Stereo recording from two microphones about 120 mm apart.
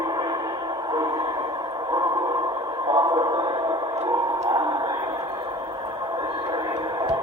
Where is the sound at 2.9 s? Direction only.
35° right (ahead or behind).